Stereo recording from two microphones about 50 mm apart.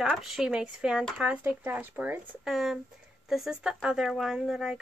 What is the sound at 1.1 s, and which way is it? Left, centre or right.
Speech, right.